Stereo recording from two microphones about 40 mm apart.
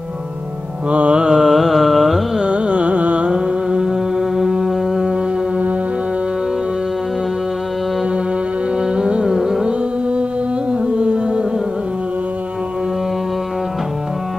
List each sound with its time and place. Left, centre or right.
0.8 s music: right
1.3 s carnatic music: centre
2.4 s carnatic music: right
3.3 s mantra: centre
4.4 s music: centre
8.9 s music: right
9.3 s carnatic music: centre
10.7 s music: right